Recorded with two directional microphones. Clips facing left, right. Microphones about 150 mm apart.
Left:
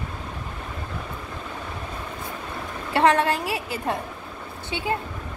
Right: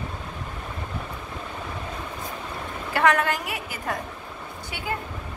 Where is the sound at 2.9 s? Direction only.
30° left (ahead or behind).